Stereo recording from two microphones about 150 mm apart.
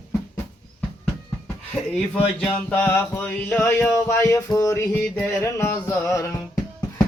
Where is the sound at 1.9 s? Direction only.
5° left (ahead or behind).